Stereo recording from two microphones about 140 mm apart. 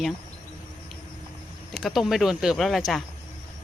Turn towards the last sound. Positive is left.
turn(degrees=0)  # may be behind; listen again after turning